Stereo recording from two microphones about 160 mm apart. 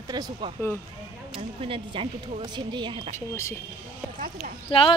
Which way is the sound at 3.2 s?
15° left (ahead or behind).